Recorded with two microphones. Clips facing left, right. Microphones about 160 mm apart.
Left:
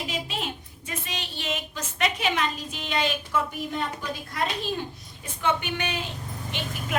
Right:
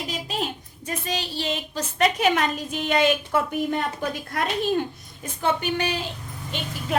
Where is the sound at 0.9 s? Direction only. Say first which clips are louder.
Right 6 dB; 40° right (ahead or behind); by 5.3 s 55° right (ahead or behind).